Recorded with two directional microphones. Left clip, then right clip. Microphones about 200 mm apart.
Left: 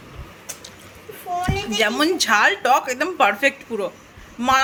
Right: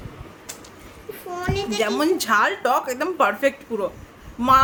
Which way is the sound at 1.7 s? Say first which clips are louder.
Left 2 dB; 10° right (ahead or behind).